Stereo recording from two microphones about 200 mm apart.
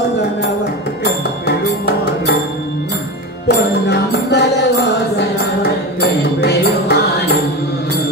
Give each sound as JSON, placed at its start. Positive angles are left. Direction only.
{"t": 3.4, "sound": "music", "side_deg": 55}